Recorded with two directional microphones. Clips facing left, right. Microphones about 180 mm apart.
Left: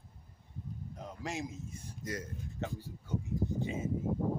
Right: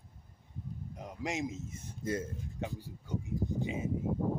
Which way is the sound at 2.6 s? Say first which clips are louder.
Even; 15° right (ahead or behind).